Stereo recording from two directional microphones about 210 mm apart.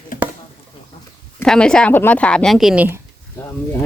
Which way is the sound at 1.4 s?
5° left (ahead or behind).